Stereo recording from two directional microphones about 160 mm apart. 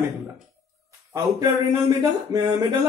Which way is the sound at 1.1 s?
25° right (ahead or behind).